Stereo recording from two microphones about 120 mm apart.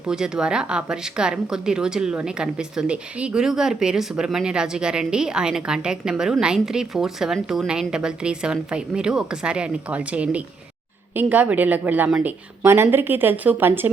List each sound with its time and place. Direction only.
0.1 s a woman's voice: 5° right (ahead or behind)